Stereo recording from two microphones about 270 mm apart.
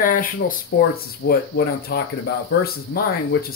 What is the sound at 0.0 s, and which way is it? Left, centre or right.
Speech, left.